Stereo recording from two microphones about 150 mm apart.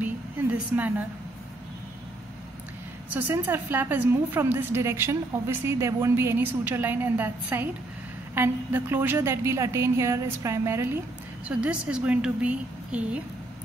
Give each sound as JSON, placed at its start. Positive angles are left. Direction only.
{"t": 0.0, "sound": "a woman's voice", "side_deg": -10}
{"t": 3.1, "sound": "a woman's voice", "side_deg": -10}